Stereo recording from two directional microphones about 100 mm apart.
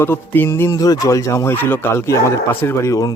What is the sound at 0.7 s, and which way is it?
A man's voice, 40° left (ahead or behind).